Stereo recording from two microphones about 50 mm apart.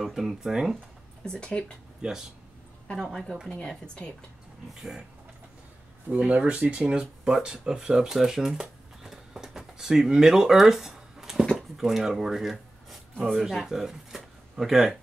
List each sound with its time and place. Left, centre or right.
0.0 s speech: centre
1.2 s speech: centre
2.0 s speech: centre
2.9 s a woman's voice: centre
6.0 s speech: right; by 15.0 s centre